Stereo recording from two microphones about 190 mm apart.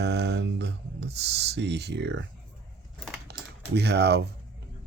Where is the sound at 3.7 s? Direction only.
60° right (ahead or behind).